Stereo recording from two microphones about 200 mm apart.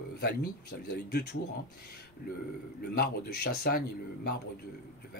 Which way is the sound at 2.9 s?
50° left (ahead or behind).